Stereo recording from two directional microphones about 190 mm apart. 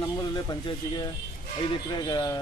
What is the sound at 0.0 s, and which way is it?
Speech, 20° left (ahead or behind).